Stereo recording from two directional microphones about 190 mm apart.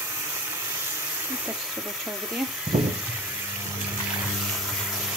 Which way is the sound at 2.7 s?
35° right (ahead or behind).